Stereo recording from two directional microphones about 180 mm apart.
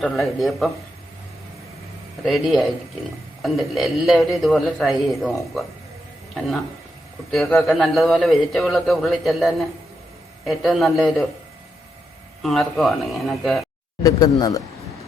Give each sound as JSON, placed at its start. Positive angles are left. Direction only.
{"t": 0.0, "sound": "a man's voice", "side_deg": 0}
{"t": 2.2, "sound": "a man's voice", "side_deg": 0}
{"t": 7.3, "sound": "a man's voice", "side_deg": 0}
{"t": 12.4, "sound": "a man's voice", "side_deg": 0}
{"t": 14.0, "sound": "speech", "side_deg": 20}